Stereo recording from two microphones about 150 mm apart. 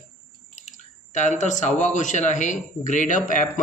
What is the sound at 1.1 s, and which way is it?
Speech, 55° left (ahead or behind).